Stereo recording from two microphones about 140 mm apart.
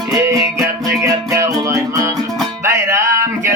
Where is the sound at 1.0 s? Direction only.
20° right (ahead or behind).